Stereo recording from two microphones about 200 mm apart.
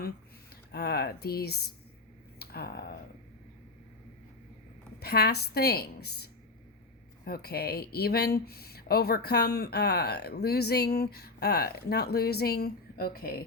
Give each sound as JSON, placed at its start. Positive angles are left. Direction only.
{"t": 0.7, "sound": "speech", "side_deg": 55}
{"t": 4.9, "sound": "speech", "side_deg": 50}